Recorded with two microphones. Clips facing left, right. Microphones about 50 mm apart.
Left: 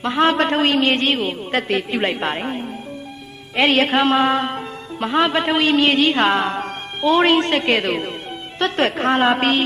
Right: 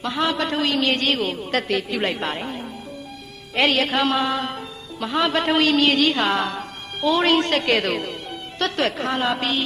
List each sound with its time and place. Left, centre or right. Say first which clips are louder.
0.0 s a man's voice: left 6 dB; left
3.7 s a man's voice: left 6 dB; left
4.2 s music: left 5 dB; left
5.2 s a man's voice: even; centre
5.6 s a woman's voice: left 4 dB; left
8.7 s a man's voice: left 6 dB; left